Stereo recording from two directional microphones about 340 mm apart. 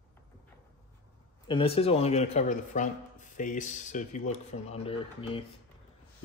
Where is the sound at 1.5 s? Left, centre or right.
Centre.